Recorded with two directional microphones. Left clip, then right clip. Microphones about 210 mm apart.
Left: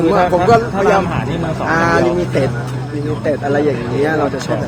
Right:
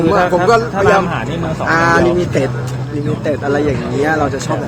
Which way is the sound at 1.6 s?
15° right (ahead or behind).